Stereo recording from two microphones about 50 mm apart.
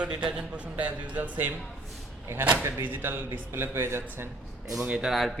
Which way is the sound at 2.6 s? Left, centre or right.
Right.